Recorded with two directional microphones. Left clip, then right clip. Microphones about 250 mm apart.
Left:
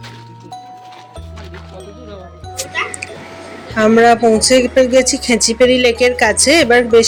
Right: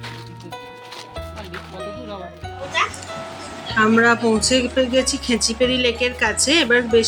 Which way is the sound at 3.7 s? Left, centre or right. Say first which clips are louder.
Left 6 dB; centre.